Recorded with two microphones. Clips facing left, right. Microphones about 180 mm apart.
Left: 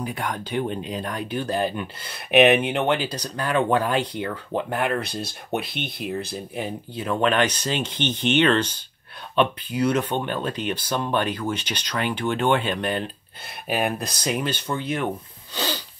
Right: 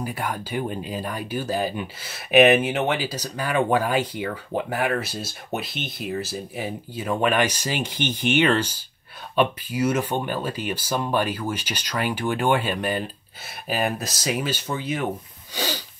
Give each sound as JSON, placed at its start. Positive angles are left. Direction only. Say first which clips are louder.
{"t": 0.0, "sound": "speech", "louder": "even", "side_deg": -5}
{"t": 5.5, "sound": "speech", "louder": "left 2 dB", "side_deg": 55}
{"t": 5.9, "sound": "speech", "louder": "even", "side_deg": 0}
{"t": 15.5, "sound": "a sound", "louder": "even", "side_deg": -10}